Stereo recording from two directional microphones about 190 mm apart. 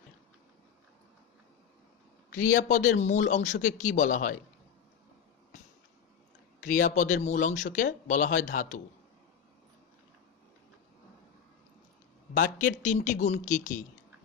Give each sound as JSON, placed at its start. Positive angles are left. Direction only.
{"t": 2.3, "sound": "a man's voice", "side_deg": 45}
{"t": 6.6, "sound": "speech", "side_deg": 45}
{"t": 12.4, "sound": "a man's voice", "side_deg": 45}